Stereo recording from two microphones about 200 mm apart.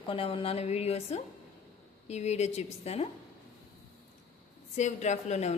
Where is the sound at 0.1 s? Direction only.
25° left (ahead or behind).